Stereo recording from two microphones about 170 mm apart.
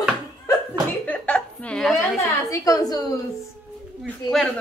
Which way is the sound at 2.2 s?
20° left (ahead or behind).